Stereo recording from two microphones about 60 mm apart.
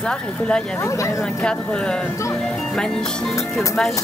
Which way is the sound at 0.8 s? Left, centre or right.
Left.